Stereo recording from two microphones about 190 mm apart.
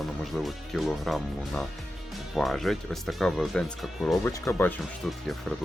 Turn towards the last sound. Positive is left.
turn(degrees=0)  # may be behind; listen again after turning